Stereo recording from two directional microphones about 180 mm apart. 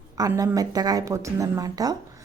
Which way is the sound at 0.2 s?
20° right (ahead or behind).